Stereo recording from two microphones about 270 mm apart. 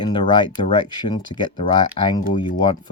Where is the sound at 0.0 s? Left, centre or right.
Centre.